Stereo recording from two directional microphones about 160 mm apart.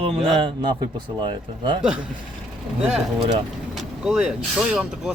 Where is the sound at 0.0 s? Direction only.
35° right (ahead or behind).